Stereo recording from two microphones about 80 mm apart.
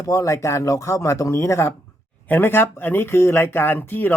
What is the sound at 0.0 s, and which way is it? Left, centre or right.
Speech, left.